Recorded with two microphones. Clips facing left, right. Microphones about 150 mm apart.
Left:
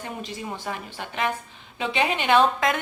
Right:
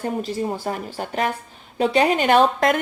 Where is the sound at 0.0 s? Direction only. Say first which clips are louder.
Right 9 dB; 40° right (ahead or behind).